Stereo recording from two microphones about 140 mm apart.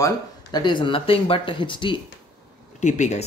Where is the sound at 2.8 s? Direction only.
55° left (ahead or behind).